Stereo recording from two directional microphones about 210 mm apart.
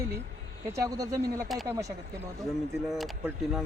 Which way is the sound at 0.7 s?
15° right (ahead or behind).